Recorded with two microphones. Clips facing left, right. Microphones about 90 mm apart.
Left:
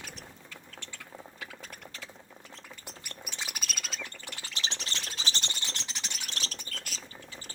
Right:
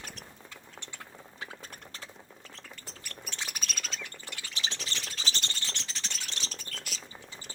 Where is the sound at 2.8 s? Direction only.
10° left (ahead or behind).